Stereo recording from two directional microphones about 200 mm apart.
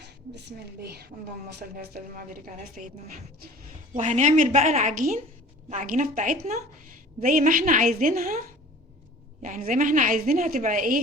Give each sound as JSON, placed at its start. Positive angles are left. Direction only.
{"t": 0.0, "sound": "a woman's voice", "side_deg": -55}
{"t": 3.9, "sound": "a woman's voice", "side_deg": -35}